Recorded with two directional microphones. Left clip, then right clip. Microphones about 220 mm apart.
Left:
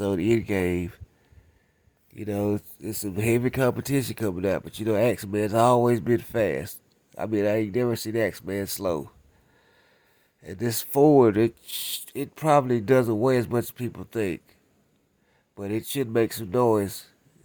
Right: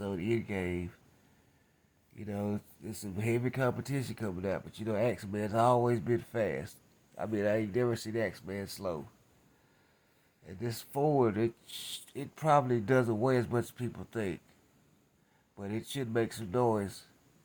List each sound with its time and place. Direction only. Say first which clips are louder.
0.0 s speech: left 11 dB; 45° left (ahead or behind)
2.1 s speech: left 11 dB; 35° left (ahead or behind)
10.4 s speech: left 10 dB; 40° left (ahead or behind); by 14.3 s 25° left (ahead or behind)
15.5 s speech: left 10 dB; 30° left (ahead or behind)